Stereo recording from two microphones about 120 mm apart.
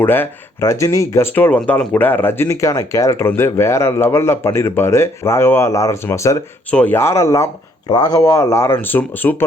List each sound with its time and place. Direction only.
0.0 s speech: 20° left (ahead or behind)
6.7 s speech: 10° left (ahead or behind)